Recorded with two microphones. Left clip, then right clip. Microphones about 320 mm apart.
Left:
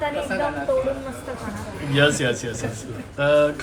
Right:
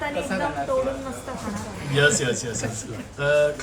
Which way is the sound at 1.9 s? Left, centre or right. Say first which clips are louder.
Left 1 dB; centre.